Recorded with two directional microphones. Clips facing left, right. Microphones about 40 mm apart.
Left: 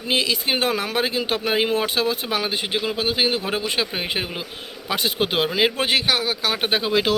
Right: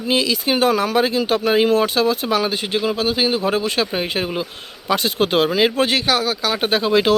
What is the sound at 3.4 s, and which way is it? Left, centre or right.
Speech, centre.